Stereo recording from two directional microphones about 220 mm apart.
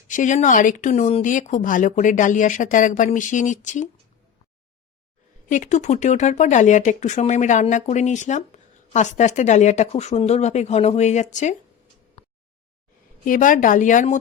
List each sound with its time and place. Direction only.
0.1 s speech: 35° left (ahead or behind)
5.5 s speech: 35° left (ahead or behind)
13.2 s speech: 35° left (ahead or behind)